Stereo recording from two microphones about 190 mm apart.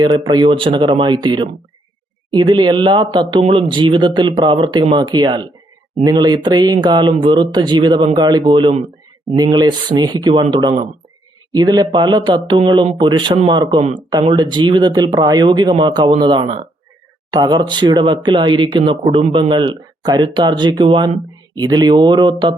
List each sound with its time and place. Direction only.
0.0 s speech: 25° right (ahead or behind)